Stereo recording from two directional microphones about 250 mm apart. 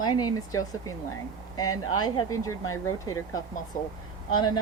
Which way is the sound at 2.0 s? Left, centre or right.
Centre.